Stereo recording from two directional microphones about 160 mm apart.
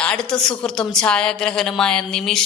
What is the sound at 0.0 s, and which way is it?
A woman's voice, 5° left (ahead or behind).